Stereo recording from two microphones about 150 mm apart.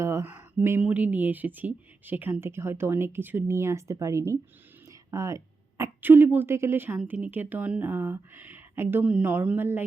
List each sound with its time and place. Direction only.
0.0 s speech: 20° right (ahead or behind)